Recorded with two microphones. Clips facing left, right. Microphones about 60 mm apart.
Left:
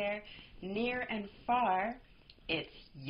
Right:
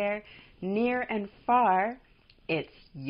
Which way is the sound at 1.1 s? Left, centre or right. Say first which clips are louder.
Right 8 dB; right.